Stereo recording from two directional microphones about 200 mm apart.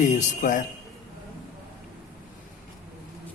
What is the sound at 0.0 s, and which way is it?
Speech, 40° left (ahead or behind).